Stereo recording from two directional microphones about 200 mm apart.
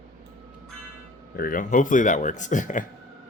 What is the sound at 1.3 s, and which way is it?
Speech, 45° left (ahead or behind).